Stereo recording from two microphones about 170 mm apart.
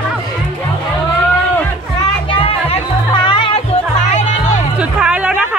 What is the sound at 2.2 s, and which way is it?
Music, 35° left (ahead or behind).